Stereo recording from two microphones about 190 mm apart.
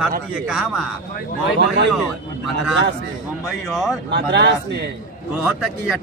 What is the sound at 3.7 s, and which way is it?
Speech, centre (ahead or behind).